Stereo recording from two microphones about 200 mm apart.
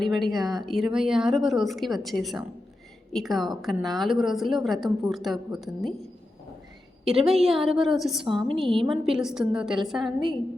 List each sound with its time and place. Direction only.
0.0 s a woman's voice: centre (ahead or behind)
7.3 s a woman's voice: centre (ahead or behind)
8.2 s a woman's voice: 25° right (ahead or behind)
8.9 s a woman's voice: centre (ahead or behind)